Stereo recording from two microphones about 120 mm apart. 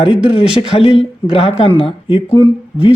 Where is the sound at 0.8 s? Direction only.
50° left (ahead or behind).